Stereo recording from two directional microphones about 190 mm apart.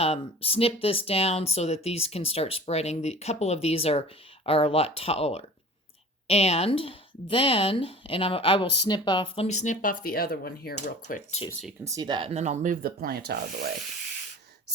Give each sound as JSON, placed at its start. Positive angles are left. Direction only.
{"t": 0.0, "sound": "speech", "side_deg": 30}
{"t": 10.8, "sound": "speech", "side_deg": 40}
{"t": 11.9, "sound": "rub", "side_deg": -20}